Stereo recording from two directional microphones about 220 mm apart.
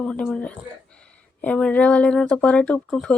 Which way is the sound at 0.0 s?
5° left (ahead or behind).